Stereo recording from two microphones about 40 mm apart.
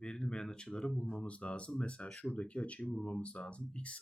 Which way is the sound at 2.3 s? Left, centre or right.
Left.